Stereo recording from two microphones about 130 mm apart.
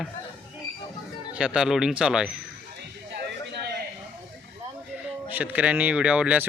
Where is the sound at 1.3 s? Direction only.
5° right (ahead or behind).